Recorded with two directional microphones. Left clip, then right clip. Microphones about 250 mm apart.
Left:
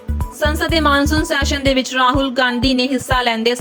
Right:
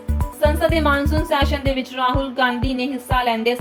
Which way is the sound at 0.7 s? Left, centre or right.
Left.